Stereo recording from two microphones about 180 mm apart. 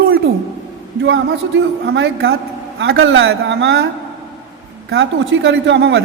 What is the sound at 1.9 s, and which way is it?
Speech, 90° right.